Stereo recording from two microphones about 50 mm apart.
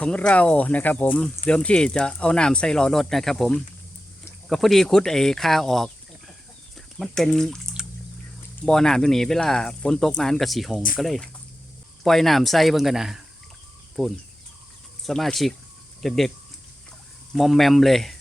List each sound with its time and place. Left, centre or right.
0.0 s speech: left
1.5 s speech: left
6.7 s chicken: centre
7.3 s speech: centre
8.6 s speech: centre
12.0 s speech: centre
14.0 s speech: centre
17.3 s speech: centre